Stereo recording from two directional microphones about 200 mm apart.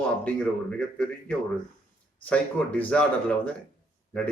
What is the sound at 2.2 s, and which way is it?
Speech, 5° left (ahead or behind).